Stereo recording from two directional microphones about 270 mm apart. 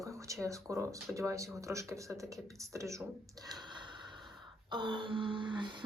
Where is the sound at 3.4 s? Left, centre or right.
Centre.